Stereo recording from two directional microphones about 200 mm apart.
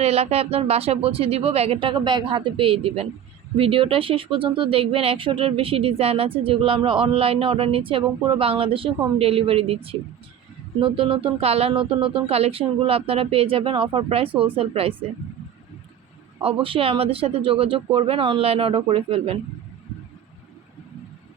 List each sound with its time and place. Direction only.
0.0 s speech: 30° right (ahead or behind)
16.4 s speech: 25° right (ahead or behind)